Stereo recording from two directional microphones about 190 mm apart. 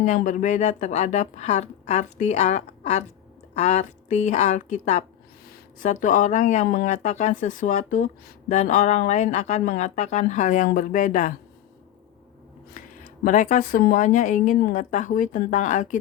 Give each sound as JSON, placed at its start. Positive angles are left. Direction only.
{"t": 0.0, "sound": "speech", "side_deg": 40}
{"t": 13.2, "sound": "a woman's voice", "side_deg": 40}